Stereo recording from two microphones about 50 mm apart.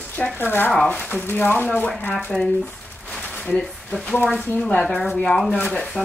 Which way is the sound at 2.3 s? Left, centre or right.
Left.